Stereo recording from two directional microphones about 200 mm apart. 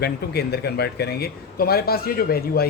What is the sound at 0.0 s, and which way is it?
A man's voice, 55° left (ahead or behind).